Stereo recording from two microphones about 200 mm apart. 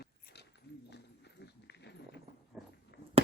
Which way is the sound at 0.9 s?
60° left (ahead or behind).